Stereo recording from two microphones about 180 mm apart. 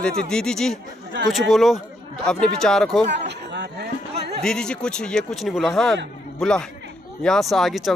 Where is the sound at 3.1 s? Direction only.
70° right (ahead or behind).